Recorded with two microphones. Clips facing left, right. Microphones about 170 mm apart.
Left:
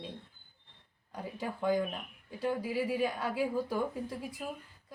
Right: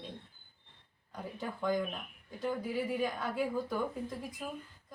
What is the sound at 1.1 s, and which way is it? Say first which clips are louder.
Speech: left 2 dB; 10° left (ahead or behind).